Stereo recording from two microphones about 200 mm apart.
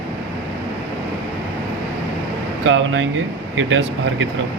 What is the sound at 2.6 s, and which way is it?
Speech, 75° right (ahead or behind).